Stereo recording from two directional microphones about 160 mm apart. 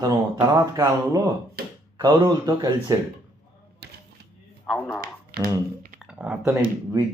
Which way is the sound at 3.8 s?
90° right.